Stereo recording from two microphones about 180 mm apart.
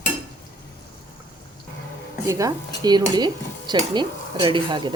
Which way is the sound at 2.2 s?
15° right (ahead or behind).